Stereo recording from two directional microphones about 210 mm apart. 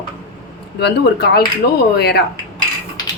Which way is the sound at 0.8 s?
50° left (ahead or behind).